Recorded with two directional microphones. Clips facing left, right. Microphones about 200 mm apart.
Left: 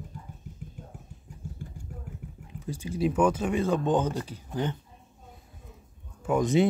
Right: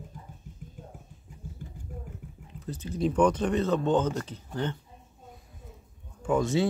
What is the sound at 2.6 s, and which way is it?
Speech, 10° left (ahead or behind).